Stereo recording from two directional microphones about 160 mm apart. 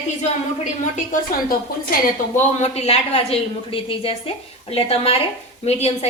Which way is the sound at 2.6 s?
40° left (ahead or behind).